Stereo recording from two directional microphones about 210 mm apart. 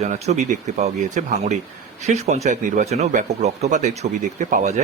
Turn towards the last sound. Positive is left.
turn(degrees=-35)  # may be behind; listen again after turning